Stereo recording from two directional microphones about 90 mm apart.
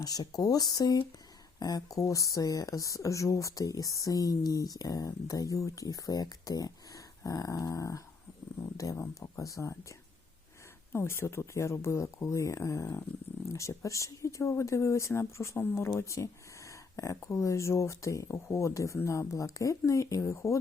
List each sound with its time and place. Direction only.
0.0 s speech: 45° left (ahead or behind)
10.9 s speech: 30° left (ahead or behind)